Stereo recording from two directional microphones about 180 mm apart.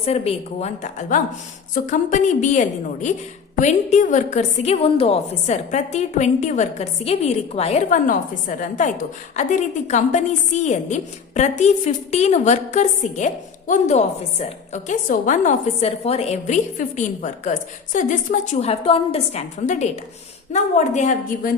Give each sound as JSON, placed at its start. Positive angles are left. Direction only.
{"t": 0.0, "sound": "a woman's voice", "side_deg": 35}